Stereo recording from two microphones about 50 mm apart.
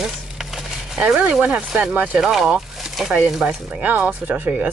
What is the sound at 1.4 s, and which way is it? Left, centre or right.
Speech, right.